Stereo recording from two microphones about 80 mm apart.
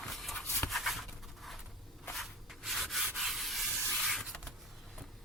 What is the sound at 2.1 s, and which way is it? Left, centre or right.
Rub, centre.